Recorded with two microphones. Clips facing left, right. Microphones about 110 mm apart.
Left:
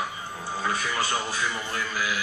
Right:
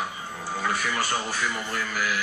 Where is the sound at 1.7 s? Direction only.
15° left (ahead or behind).